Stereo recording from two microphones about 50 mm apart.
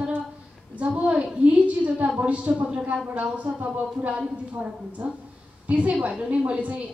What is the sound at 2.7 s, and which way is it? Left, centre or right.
A woman's voice, right.